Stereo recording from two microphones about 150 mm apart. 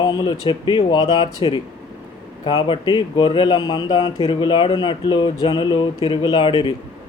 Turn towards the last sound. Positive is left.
turn(degrees=30)  # may be behind; listen again after turning